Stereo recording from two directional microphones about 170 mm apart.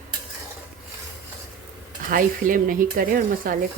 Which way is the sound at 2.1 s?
55° right (ahead or behind).